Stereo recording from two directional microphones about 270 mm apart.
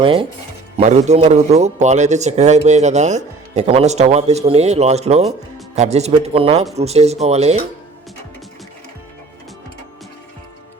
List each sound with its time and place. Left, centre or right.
0.0 s a man's voice: centre